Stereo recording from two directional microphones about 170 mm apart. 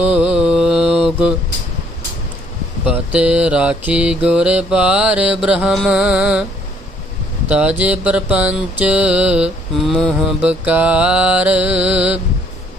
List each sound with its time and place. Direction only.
0.0 s mantra: 5° right (ahead or behind)
2.8 s mantra: 5° right (ahead or behind)
7.4 s mantra: 5° right (ahead or behind)
10.4 s mantra: 10° right (ahead or behind)